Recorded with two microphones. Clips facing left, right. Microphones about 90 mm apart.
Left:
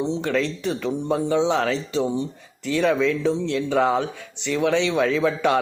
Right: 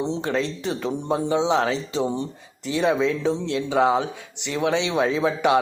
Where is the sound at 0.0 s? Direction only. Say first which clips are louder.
Left 1 dB; 30° right (ahead or behind).